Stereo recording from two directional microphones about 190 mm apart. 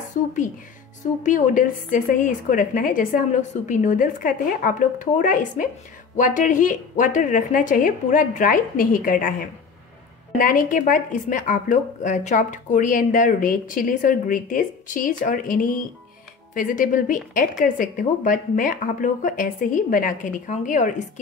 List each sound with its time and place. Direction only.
1.2 s speech: 45° left (ahead or behind)